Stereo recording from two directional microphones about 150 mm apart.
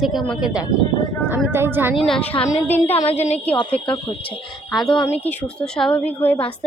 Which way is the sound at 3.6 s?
35° left (ahead or behind).